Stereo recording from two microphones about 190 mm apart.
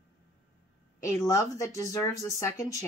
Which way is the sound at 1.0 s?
15° left (ahead or behind).